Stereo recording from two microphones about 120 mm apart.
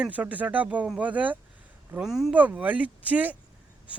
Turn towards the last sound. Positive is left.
turn(degrees=-15)  # may be behind; listen again after turning